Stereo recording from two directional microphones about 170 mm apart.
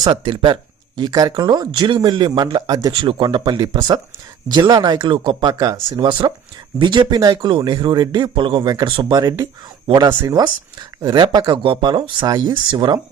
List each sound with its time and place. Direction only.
0.0 s speech: 25° right (ahead or behind)
10.1 s speech: 15° right (ahead or behind)
11.0 s speech: 25° right (ahead or behind)